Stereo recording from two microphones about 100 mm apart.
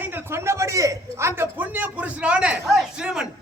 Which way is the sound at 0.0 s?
25° right (ahead or behind).